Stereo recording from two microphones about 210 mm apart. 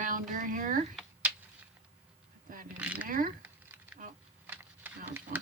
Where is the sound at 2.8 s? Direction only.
5° right (ahead or behind).